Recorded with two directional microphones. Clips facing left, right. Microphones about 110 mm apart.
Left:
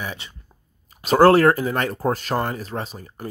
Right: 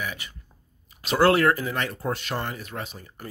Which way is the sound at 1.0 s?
40° left (ahead or behind).